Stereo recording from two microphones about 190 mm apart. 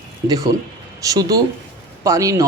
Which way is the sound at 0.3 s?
15° right (ahead or behind).